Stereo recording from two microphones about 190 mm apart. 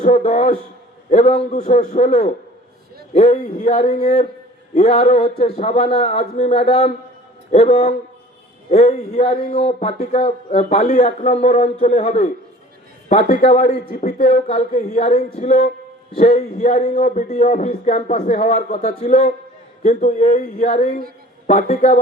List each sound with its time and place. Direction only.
0.0 s a man's voice: 35° left (ahead or behind)